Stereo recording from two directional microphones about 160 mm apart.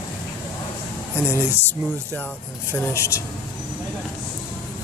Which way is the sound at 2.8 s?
15° left (ahead or behind).